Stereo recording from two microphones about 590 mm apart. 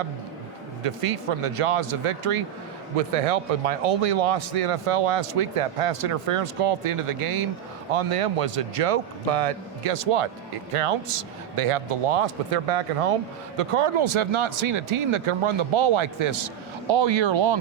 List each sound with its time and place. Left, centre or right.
0.8 s speech: right
2.9 s speech: right